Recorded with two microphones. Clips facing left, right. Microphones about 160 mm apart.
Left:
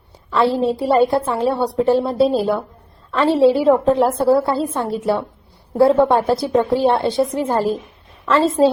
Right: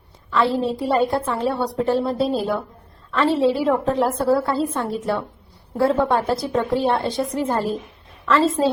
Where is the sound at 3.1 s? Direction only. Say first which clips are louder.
Left 5 dB; 30° left (ahead or behind).